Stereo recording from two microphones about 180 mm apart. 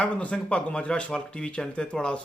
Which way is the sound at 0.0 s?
5° left (ahead or behind).